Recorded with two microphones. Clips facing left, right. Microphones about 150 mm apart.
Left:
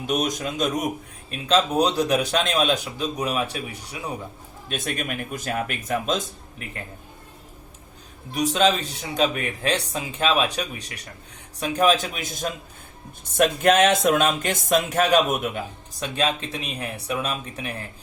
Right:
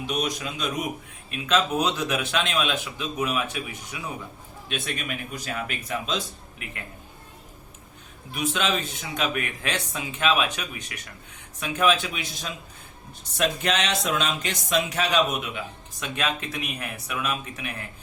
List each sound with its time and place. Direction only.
0.1 s speech: 45° left (ahead or behind)
1.3 s speech: 35° left (ahead or behind)
4.7 s speech: 45° left (ahead or behind)
8.3 s speech: 35° left (ahead or behind)
16.0 s speech: 30° left (ahead or behind)